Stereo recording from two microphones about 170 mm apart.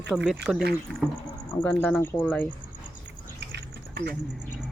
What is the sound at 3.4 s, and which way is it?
Insect, 75° right (ahead or behind).